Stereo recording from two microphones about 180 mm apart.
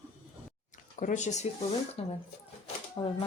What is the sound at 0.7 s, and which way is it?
Speech, 45° left (ahead or behind).